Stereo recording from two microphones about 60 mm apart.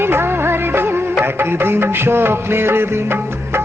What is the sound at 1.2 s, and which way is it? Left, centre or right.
Music, right.